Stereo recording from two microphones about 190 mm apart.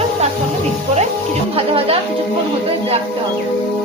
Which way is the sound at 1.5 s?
30° right (ahead or behind).